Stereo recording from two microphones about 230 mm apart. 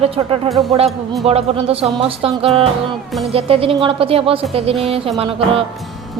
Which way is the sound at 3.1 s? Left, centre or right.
Centre.